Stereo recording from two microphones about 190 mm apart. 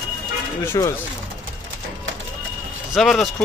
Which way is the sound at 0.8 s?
20° left (ahead or behind).